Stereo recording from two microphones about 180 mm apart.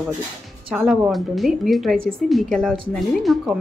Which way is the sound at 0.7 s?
Centre (ahead or behind).